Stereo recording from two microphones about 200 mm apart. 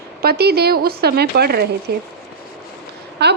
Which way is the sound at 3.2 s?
55° right (ahead or behind).